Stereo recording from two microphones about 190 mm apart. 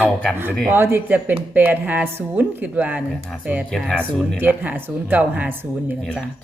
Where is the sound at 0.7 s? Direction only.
10° right (ahead or behind).